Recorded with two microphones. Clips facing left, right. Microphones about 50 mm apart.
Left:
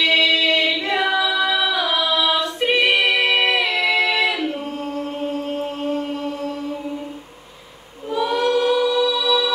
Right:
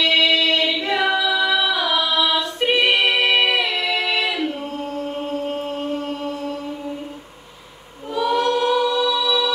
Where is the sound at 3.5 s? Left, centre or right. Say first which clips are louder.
Left 3 dB; centre.